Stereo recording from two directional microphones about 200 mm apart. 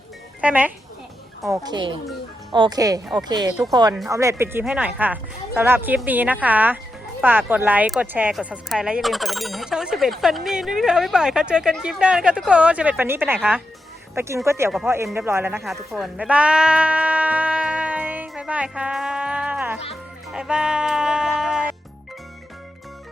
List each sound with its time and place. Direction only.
0.4 s a woman's voice: 10° right (ahead or behind)
1.5 s a woman's voice: 20° right (ahead or behind)
15.9 s music: centre (ahead or behind)